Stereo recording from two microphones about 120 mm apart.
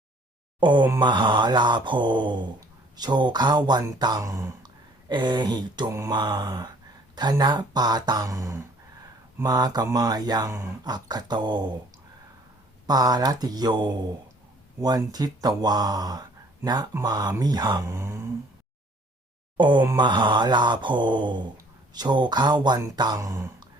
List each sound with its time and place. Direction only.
0.6 s groan: 40° right (ahead or behind)
0.9 s speech: 40° right (ahead or behind)
5.9 s speech: 25° right (ahead or behind)
12.9 s speech: 35° right (ahead or behind)
19.5 s speech: 40° right (ahead or behind)